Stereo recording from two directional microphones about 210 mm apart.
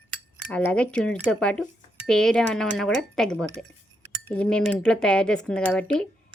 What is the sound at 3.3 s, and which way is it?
Speech, 15° right (ahead or behind).